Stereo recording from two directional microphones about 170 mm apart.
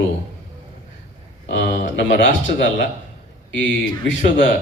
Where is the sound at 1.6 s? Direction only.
90° left.